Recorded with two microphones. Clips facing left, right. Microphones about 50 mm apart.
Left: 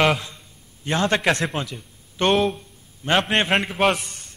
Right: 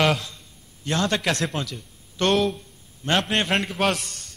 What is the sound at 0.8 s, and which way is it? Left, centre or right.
A man's voice, left.